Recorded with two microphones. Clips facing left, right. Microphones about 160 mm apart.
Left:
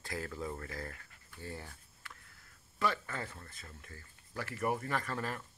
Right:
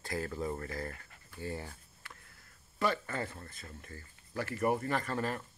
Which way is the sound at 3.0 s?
30° right (ahead or behind).